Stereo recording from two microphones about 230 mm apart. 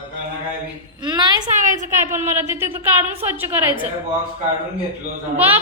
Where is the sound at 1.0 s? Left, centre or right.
Centre.